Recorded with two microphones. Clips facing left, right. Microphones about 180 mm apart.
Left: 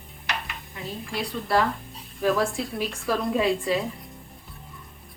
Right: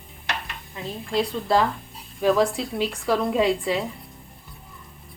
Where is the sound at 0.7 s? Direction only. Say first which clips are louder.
Right 7 dB; 20° right (ahead or behind).